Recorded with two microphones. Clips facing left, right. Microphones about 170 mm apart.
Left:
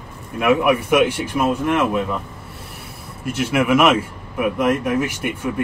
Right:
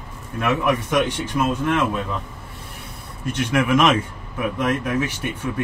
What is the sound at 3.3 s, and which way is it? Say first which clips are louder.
Speech: left 2 dB; 5° left (ahead or behind).